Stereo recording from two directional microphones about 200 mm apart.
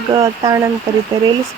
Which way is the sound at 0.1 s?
20° right (ahead or behind).